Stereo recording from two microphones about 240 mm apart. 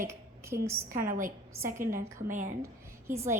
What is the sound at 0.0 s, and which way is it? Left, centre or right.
A woman's voice, centre.